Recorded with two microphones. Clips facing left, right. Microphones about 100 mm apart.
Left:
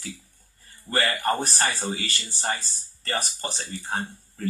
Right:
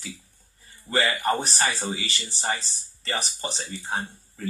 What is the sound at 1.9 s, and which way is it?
Speech, 45° left (ahead or behind).